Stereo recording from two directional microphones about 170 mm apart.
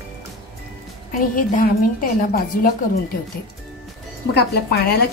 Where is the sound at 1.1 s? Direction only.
55° left (ahead or behind).